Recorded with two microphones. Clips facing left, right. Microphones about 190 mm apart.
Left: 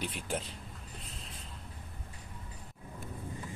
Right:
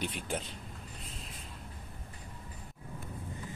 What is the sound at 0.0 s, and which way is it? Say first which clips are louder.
Speech: even; 5° left (ahead or behind).